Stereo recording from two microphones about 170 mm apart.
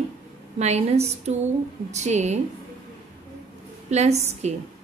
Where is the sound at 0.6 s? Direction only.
40° right (ahead or behind).